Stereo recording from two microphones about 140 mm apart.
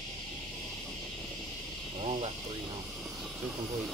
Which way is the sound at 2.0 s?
45° right (ahead or behind).